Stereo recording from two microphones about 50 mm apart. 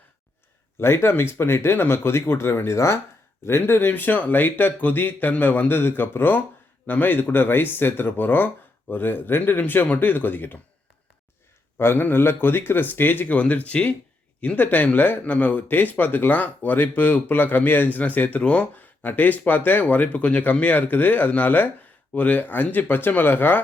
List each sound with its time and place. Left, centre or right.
0.8 s speech: left
3.4 s speech: left
11.9 s speech: left